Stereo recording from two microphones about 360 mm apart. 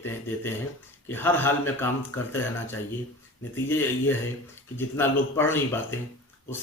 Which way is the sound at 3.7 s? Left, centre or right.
Centre.